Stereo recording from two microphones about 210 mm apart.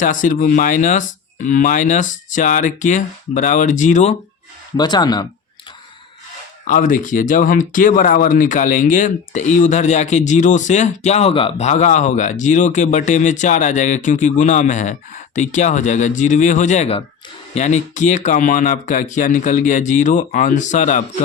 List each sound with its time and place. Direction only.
0.0 s speech: 40° left (ahead or behind)
4.8 s speech: 20° left (ahead or behind)
6.7 s speech: 40° left (ahead or behind)